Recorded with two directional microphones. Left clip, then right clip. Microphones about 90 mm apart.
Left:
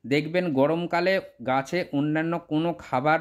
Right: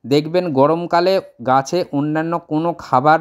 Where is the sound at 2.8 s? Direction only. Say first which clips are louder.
Right 11 dB; 50° right (ahead or behind).